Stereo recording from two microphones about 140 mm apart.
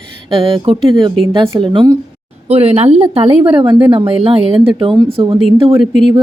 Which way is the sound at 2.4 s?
45° right (ahead or behind).